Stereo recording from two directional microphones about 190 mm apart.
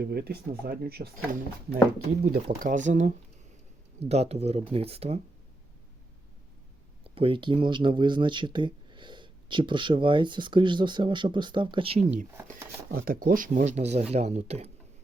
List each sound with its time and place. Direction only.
0.0 s speech: 55° right (ahead or behind); by 5.2 s 30° right (ahead or behind)
7.0 s speech: 30° right (ahead or behind)
12.9 s speech: 50° right (ahead or behind); by 14.7 s 35° right (ahead or behind)